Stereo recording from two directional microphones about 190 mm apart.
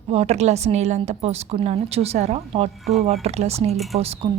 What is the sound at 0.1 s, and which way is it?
A woman's voice, 35° right (ahead or behind).